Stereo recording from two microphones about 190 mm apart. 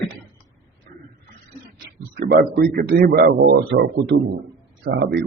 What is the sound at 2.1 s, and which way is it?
A man's voice, 55° right (ahead or behind).